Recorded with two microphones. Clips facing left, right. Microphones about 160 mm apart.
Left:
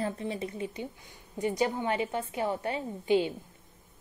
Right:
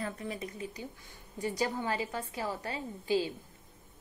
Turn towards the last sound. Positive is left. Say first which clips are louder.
# left 4 dB
turn(degrees=25)  # may be behind; listen again after turning